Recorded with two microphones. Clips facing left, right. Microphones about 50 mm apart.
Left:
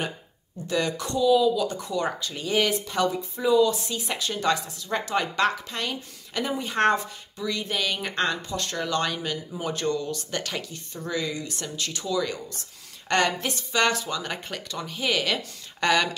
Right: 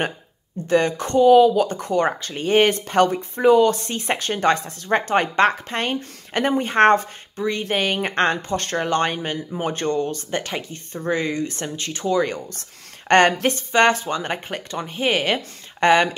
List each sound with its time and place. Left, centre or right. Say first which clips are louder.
0.7 s speech: right 7 dB; right